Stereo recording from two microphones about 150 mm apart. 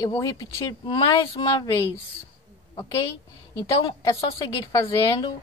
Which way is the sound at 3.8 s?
25° left (ahead or behind).